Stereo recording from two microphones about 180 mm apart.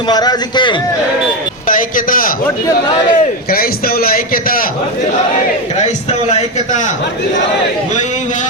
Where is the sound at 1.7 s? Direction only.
50° left (ahead or behind).